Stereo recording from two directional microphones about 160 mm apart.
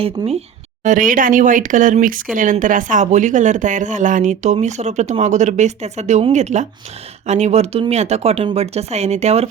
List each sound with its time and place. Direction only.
0.0 s speech: 40° right (ahead or behind)
0.9 s speech: 55° right (ahead or behind)